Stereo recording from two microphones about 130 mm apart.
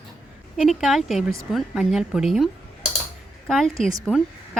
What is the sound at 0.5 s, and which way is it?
Speech, centre (ahead or behind).